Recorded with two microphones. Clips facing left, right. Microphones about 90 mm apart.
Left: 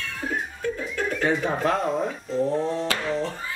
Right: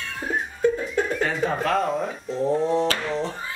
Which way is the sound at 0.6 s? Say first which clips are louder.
Right 9 dB; 20° right (ahead or behind).